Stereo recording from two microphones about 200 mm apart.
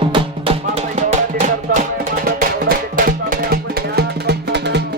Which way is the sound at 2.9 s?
45° right (ahead or behind).